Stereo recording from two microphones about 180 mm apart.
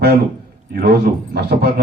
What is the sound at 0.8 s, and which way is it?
A man's voice, 60° right (ahead or behind).